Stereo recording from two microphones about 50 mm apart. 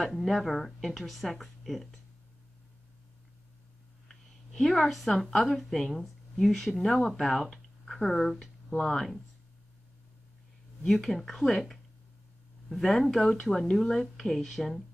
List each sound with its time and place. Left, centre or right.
0.0 s speech: centre
4.6 s speech: centre
10.8 s speech: centre